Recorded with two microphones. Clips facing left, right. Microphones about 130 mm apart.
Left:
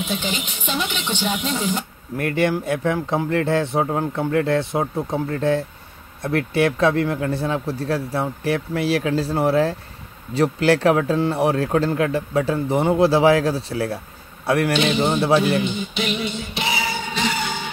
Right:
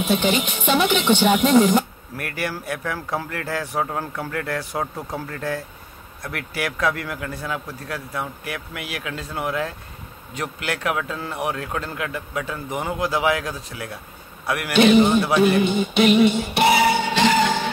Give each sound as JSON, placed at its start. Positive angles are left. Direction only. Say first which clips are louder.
{"t": 0.0, "sound": "speech", "louder": "right 6 dB", "side_deg": -60}
{"t": 2.1, "sound": "a man's voice", "louder": "left 8 dB", "side_deg": 25}
{"t": 15.6, "sound": "music", "louder": "right 7 dB", "side_deg": -55}